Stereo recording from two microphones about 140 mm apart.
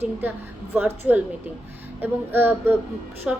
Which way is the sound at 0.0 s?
15° right (ahead or behind).